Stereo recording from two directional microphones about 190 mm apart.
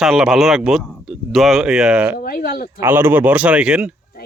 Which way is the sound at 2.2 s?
50° left (ahead or behind).